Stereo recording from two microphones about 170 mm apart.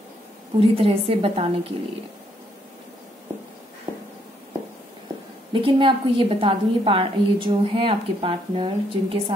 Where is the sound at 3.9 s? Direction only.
20° right (ahead or behind).